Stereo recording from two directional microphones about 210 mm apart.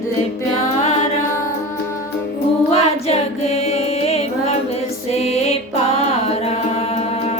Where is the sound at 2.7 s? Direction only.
30° left (ahead or behind).